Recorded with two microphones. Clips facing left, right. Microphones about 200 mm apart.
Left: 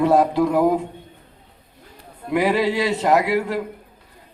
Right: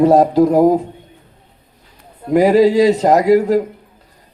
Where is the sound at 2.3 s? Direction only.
40° right (ahead or behind).